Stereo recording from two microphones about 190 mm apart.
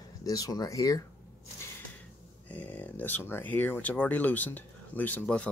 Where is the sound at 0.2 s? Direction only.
20° left (ahead or behind).